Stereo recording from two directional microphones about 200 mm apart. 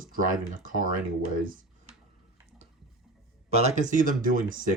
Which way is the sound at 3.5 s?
35° right (ahead or behind).